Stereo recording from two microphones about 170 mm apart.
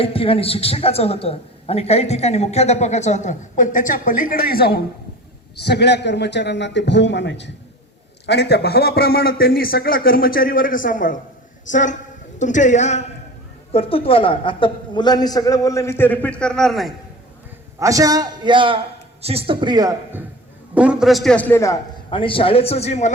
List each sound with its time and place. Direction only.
0.0 s a man's voice: 35° left (ahead or behind); by 4.8 s 65° left (ahead or behind)
5.6 s a man's voice: 80° left
8.3 s a man's voice: 75° left (ahead or behind); by 16.9 s centre (ahead or behind)
17.7 s a man's voice: 20° right (ahead or behind)
20.7 s a man's voice: 5° right (ahead or behind); by 21.8 s 15° left (ahead or behind)
22.1 s a man's voice: 30° left (ahead or behind)